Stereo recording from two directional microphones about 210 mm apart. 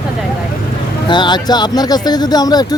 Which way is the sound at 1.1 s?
20° left (ahead or behind).